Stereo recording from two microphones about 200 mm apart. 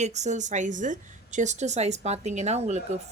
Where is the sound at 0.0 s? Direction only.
35° right (ahead or behind).